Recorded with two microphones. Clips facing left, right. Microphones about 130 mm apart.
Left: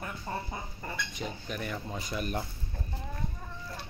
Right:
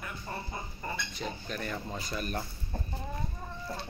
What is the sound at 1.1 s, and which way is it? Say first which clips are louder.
Speech: even; 15° left (ahead or behind).